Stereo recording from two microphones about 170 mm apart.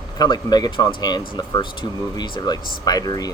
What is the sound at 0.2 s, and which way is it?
Speech, 25° left (ahead or behind).